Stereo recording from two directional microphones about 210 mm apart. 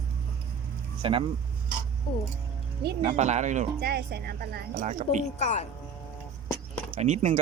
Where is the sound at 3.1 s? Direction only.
35° right (ahead or behind).